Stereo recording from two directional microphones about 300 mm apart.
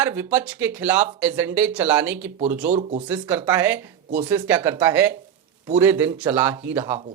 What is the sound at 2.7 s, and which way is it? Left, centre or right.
Speech, right.